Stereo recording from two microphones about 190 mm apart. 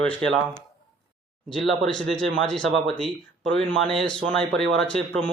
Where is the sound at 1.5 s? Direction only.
Centre (ahead or behind).